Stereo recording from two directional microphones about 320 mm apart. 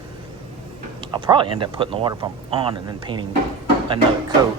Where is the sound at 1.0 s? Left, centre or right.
Centre.